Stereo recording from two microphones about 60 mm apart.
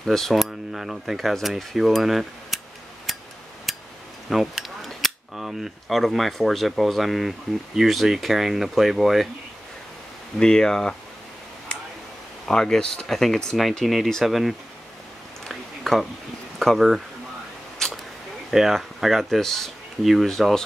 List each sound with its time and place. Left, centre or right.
0.0 s cutlery: centre
3.7 s a sound: centre
4.3 s cutlery: centre
10.4 s speech: centre
11.7 s a sound: centre
12.4 s speech: centre
13.5 s cutlery: centre
15.4 s a sound: centre
16.5 s cutlery: centre
18.5 s cutlery: centre